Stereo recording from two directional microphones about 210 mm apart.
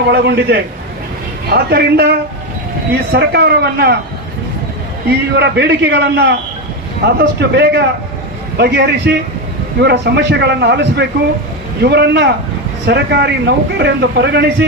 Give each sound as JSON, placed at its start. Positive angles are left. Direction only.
{"t": 0.1, "sound": "a man's voice", "side_deg": -55}
{"t": 5.0, "sound": "a man's voice", "side_deg": -50}